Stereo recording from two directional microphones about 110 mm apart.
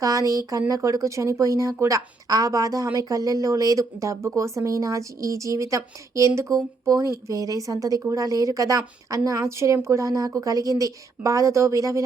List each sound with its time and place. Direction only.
0.0 s speech: 30° right (ahead or behind)